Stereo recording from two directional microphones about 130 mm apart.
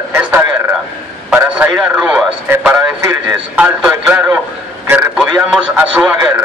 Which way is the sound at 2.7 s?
20° right (ahead or behind).